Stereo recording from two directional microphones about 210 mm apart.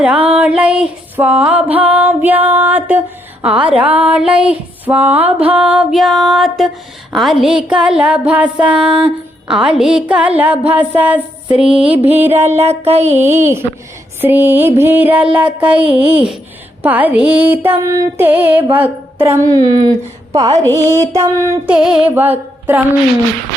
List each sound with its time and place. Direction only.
0.0 s music: 5° right (ahead or behind)
3.7 s a sound: 5° right (ahead or behind)
10.8 s music: 10° right (ahead or behind)
12.4 s a sound: 30° right (ahead or behind)
13.4 s music: 10° right (ahead or behind)
16.0 s speech: 30° right (ahead or behind)
16.8 s music: 10° right (ahead or behind)
21.8 s music: 5° right (ahead or behind)